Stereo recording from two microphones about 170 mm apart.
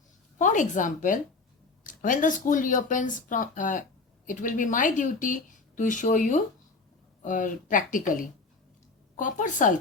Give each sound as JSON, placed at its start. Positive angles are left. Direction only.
{"t": 0.3, "sound": "a woman's voice", "side_deg": 45}